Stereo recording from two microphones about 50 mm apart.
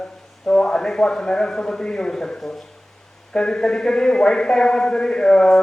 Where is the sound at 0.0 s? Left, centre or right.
Centre.